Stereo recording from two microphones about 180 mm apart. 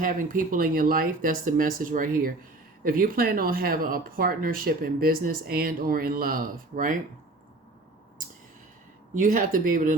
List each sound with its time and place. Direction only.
0.0 s speech: 50° right (ahead or behind)
9.1 s speech: 50° right (ahead or behind)